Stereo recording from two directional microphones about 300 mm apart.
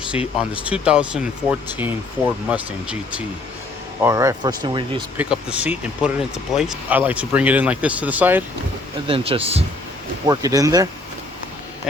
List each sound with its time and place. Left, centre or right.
0.3 s speech: centre
5.2 s speech: centre
9.0 s speech: centre